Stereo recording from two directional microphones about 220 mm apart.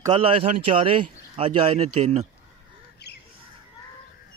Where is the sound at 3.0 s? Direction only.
50° left (ahead or behind).